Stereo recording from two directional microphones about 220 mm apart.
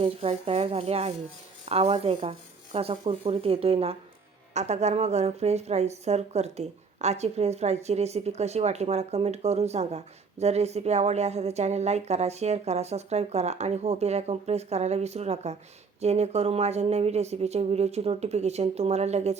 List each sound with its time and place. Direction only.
0.0 s a woman's voice: 25° right (ahead or behind)